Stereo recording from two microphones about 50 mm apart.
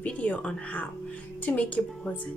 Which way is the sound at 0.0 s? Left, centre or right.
Left.